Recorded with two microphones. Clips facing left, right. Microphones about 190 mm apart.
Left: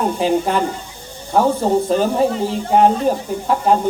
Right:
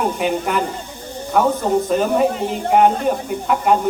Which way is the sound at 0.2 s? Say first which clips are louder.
Left 3 dB; 30° left (ahead or behind).